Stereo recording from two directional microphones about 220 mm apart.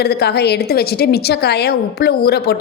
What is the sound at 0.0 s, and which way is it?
A woman's voice, 45° left (ahead or behind).